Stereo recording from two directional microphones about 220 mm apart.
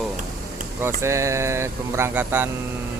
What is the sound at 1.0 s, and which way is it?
Speech, 15° right (ahead or behind).